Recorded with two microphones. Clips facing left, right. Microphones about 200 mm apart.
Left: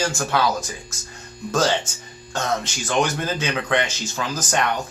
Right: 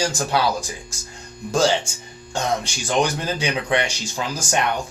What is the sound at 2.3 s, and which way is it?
Speech, 15° right (ahead or behind).